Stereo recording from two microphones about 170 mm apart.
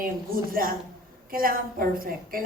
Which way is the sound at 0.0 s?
55° right (ahead or behind).